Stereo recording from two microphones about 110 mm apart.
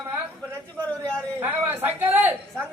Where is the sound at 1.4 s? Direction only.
20° right (ahead or behind).